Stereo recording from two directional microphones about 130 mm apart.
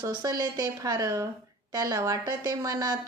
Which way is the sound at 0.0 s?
30° right (ahead or behind).